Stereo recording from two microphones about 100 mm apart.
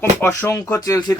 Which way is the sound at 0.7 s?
35° left (ahead or behind).